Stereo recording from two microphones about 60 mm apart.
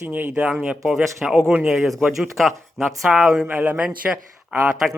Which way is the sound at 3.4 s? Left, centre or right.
Right.